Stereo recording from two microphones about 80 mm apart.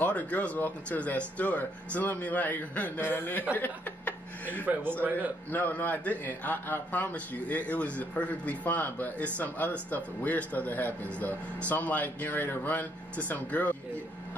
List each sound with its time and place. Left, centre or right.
0.0 s a man's voice: centre